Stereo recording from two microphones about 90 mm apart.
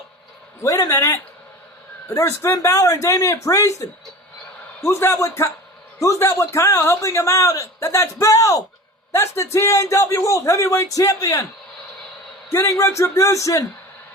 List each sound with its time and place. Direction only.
0.6 s a man's voice: 35° left (ahead or behind)
12.5 s a man's voice: 25° left (ahead or behind)